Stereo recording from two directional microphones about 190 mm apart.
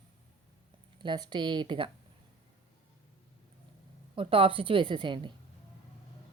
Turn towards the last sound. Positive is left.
turn(degrees=-25)  # may be behind; listen again after turning